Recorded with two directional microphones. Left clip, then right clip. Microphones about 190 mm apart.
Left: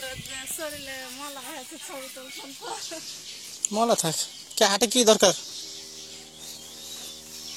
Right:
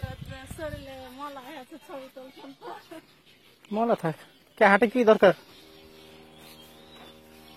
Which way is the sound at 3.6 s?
Centre (ahead or behind).